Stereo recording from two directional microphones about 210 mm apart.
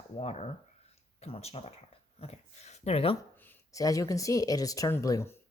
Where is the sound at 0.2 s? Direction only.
30° left (ahead or behind).